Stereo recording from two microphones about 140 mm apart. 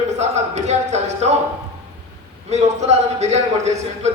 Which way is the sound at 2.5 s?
50° right (ahead or behind).